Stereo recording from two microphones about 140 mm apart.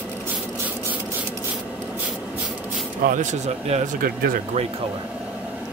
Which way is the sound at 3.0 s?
65° right (ahead or behind).